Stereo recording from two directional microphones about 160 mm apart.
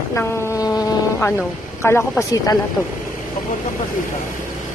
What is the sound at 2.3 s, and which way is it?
Speech, 25° left (ahead or behind).